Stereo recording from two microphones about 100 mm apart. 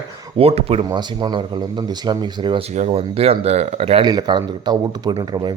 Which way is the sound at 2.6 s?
90° right.